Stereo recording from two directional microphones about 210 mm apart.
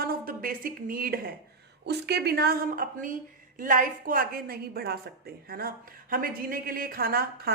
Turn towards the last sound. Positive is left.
turn(degrees=-45)  # may be behind; listen again after turning